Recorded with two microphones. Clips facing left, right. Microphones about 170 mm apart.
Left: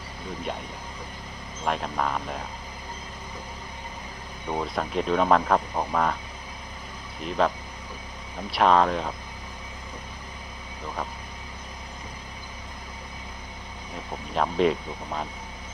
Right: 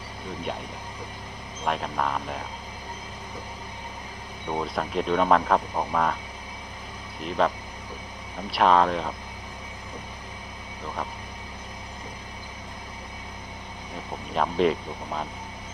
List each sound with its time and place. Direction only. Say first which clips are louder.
1.6 s speech: even; centre (ahead or behind)
4.4 s speech: even; centre (ahead or behind)
7.2 s speech: even; centre (ahead or behind)
13.9 s speech: even; centre (ahead or behind)